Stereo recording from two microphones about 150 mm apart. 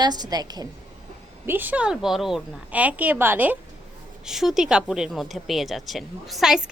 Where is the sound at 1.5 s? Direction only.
10° right (ahead or behind).